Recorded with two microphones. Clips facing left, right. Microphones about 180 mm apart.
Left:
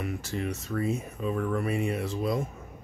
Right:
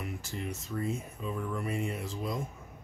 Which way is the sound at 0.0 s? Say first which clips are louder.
Left 6 dB; 70° left (ahead or behind).